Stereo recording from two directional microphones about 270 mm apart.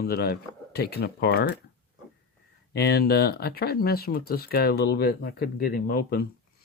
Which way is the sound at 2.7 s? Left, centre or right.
Left.